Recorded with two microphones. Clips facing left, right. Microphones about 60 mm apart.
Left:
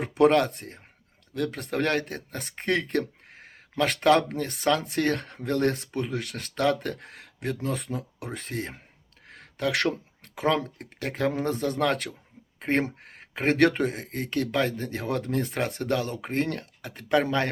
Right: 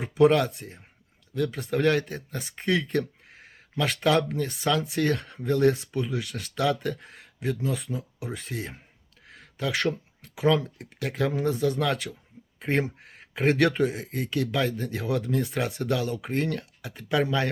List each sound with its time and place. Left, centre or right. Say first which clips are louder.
0.0 s speech: even; left
9.2 s a sound: left 2 dB; left
10.3 s speech: right 2 dB; left